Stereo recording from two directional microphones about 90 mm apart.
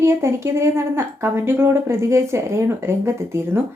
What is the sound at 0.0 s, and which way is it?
A woman's voice, 30° right (ahead or behind).